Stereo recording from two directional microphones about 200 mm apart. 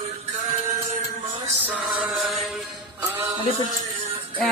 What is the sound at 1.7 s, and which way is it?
Music, centre (ahead or behind).